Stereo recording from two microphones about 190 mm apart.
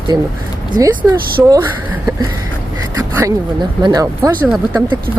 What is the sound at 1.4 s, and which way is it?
Speech, 10° right (ahead or behind).